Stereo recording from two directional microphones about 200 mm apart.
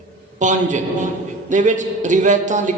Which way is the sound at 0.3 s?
40° right (ahead or behind).